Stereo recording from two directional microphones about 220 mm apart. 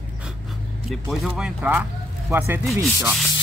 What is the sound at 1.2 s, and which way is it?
Speech, 5° right (ahead or behind).